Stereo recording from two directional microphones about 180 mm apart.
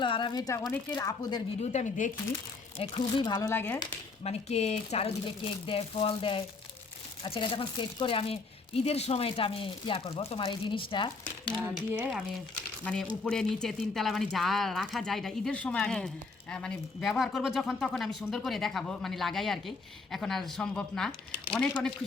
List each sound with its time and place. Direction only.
0.0 s speech: 25° left (ahead or behind)
1.7 s speech: 40° left (ahead or behind)
2.7 s speech: 30° left (ahead or behind); by 3.8 s 10° left (ahead or behind)
4.2 s speech: 35° left (ahead or behind)
12.8 s speech: 5° left (ahead or behind)